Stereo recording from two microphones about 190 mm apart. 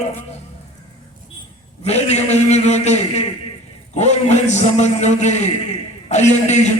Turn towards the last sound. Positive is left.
turn(degrees=40)  # may be behind; listen again after turning